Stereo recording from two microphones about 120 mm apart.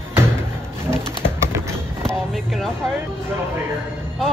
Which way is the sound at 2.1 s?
5° left (ahead or behind).